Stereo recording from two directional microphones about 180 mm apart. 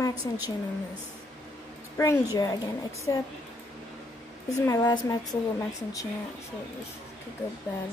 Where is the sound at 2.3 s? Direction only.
20° left (ahead or behind).